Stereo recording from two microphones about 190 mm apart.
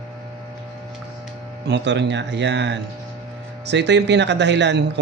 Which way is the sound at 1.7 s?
65° right (ahead or behind).